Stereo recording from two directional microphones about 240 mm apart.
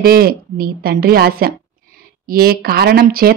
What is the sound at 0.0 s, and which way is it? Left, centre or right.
Speech, right.